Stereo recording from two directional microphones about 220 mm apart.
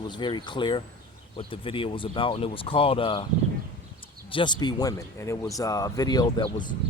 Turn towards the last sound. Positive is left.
turn(degrees=20)  # may be behind; listen again after turning